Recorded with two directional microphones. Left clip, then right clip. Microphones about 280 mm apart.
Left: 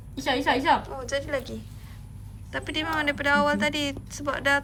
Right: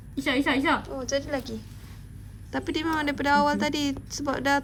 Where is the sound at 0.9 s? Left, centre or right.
Centre.